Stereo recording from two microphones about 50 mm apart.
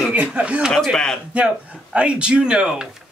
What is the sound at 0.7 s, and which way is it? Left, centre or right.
Speech, centre.